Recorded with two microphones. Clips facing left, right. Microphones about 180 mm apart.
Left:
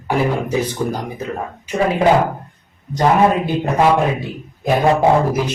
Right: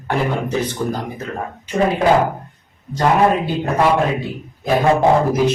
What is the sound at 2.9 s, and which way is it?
Speech, 15° left (ahead or behind).